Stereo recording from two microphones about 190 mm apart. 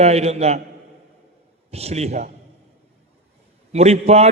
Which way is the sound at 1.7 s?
35° right (ahead or behind).